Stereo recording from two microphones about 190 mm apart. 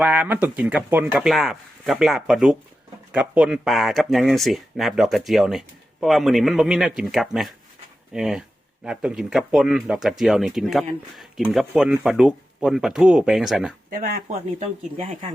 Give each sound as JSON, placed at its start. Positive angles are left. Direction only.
{"t": 0.0, "sound": "speech", "side_deg": -10}
{"t": 13.9, "sound": "speech", "side_deg": -45}